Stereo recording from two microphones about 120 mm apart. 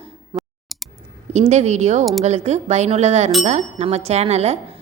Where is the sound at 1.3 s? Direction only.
70° right (ahead or behind).